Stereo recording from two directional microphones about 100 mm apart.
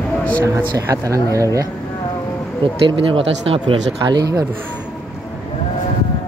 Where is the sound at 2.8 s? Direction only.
65° right (ahead or behind).